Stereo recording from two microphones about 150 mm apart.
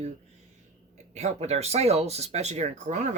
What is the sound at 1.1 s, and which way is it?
Speech, 45° right (ahead or behind).